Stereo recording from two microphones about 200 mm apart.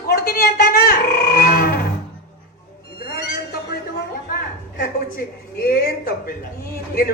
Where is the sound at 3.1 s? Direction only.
50° left (ahead or behind).